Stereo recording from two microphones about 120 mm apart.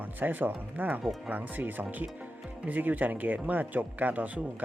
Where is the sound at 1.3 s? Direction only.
15° right (ahead or behind).